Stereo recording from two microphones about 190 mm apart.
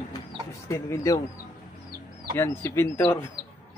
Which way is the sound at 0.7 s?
15° left (ahead or behind).